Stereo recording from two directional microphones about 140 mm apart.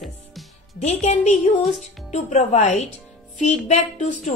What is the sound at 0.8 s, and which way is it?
A woman's voice, 55° left (ahead or behind).